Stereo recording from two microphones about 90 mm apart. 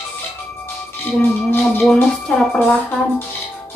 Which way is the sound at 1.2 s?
25° left (ahead or behind).